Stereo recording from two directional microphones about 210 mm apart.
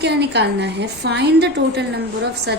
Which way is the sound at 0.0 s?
55° right (ahead or behind).